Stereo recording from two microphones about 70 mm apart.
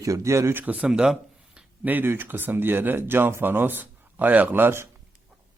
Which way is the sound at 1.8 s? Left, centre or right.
Right.